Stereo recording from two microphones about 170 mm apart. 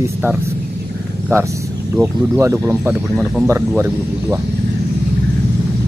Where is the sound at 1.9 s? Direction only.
15° right (ahead or behind).